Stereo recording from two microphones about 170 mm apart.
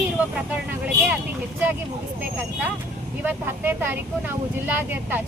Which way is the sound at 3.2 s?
10° right (ahead or behind).